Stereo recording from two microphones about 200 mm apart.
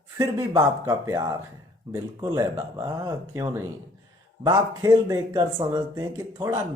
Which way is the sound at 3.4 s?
15° right (ahead or behind).